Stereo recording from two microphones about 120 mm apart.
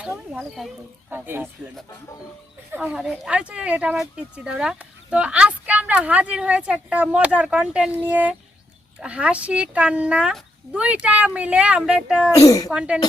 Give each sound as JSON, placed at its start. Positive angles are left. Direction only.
{"t": 0.3, "sound": "speech", "side_deg": 0}
{"t": 1.1, "sound": "speech", "side_deg": -15}
{"t": 2.7, "sound": "speech", "side_deg": -10}
{"t": 12.4, "sound": "speech", "side_deg": 30}
{"t": 12.7, "sound": "speech", "side_deg": -10}